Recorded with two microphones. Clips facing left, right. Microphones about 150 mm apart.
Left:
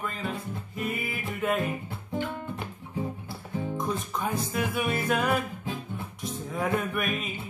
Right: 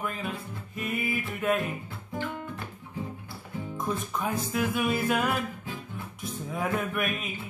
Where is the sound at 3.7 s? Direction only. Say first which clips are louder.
Right 3 dB; centre (ahead or behind).